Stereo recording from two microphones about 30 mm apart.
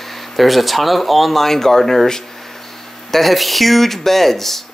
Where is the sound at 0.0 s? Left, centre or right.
Centre.